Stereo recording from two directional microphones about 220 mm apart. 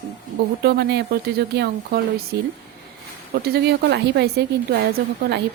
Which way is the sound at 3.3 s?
45° right (ahead or behind).